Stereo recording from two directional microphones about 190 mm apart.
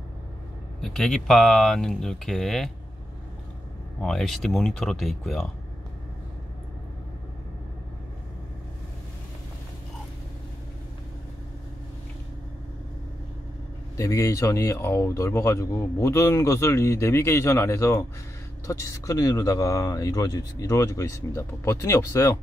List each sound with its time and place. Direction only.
0.7 s speech: centre (ahead or behind)
4.0 s speech: centre (ahead or behind)
13.9 s speech: 15° left (ahead or behind)